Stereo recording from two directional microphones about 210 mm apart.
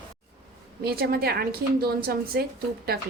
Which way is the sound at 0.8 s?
45° right (ahead or behind).